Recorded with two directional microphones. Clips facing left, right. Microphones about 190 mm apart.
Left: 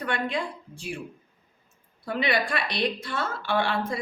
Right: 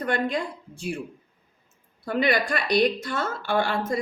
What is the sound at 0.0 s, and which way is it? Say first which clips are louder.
Speech: right 3 dB; 40° right (ahead or behind).